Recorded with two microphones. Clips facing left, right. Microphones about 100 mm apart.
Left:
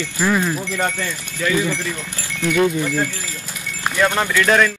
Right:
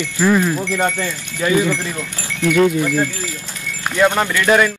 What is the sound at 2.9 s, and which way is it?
Speech, 20° right (ahead or behind).